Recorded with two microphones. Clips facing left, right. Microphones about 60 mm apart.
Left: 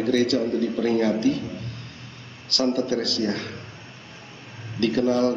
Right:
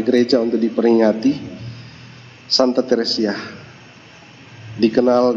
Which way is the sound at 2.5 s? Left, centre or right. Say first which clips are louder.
Right 8 dB; right.